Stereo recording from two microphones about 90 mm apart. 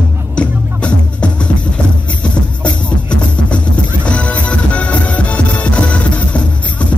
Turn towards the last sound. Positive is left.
turn(degrees=15)  # may be behind; listen again after turning